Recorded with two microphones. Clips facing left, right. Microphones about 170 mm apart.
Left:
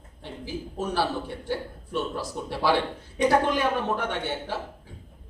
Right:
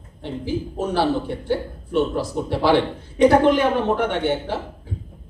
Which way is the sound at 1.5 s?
25° right (ahead or behind).